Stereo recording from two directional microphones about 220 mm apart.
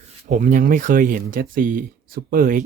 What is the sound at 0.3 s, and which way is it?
Speech, 35° right (ahead or behind).